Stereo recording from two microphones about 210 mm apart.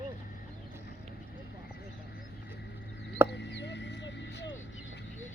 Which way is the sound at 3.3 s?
55° left (ahead or behind).